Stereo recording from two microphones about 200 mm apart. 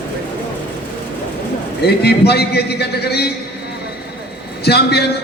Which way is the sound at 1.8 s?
55° left (ahead or behind).